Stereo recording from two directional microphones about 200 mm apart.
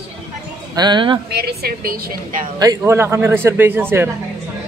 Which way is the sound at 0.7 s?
20° right (ahead or behind).